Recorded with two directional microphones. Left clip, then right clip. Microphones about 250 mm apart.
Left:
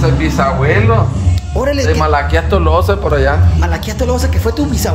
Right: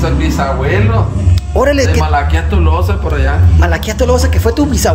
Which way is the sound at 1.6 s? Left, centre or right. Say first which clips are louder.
Right 4 dB; centre.